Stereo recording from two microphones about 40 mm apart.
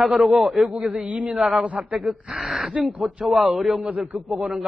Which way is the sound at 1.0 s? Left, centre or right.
Right.